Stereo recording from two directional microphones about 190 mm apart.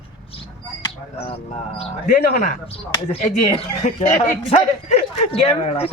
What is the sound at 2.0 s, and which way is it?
Speech, 50° left (ahead or behind).